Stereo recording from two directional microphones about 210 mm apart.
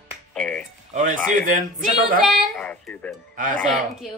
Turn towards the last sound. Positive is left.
turn(degrees=-40)  # may be behind; listen again after turning